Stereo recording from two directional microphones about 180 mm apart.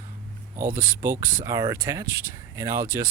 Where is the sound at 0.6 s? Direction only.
10° right (ahead or behind).